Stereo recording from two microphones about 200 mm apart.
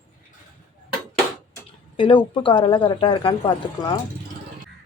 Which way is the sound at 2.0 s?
25° left (ahead or behind).